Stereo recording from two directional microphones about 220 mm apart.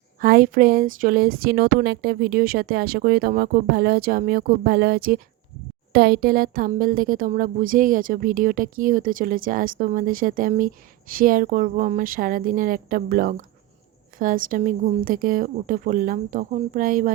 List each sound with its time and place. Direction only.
0.2 s speech: 40° right (ahead or behind)